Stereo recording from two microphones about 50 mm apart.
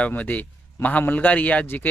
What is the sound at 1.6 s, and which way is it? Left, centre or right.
Speech, left.